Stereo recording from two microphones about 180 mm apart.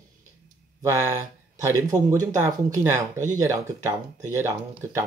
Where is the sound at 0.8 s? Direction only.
15° right (ahead or behind).